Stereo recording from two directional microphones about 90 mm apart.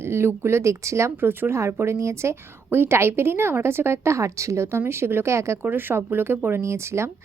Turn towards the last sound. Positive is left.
turn(degrees=-30)  # may be behind; listen again after turning